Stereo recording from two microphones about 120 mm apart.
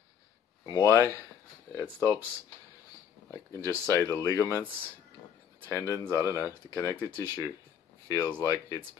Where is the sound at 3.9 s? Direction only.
25° left (ahead or behind).